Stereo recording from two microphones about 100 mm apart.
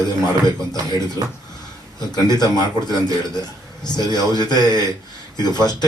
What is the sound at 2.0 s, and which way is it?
Speech, 45° left (ahead or behind).